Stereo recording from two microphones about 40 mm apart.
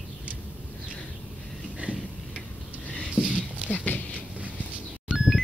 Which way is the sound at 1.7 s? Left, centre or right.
Right.